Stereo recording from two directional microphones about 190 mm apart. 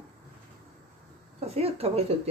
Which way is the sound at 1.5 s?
30° right (ahead or behind).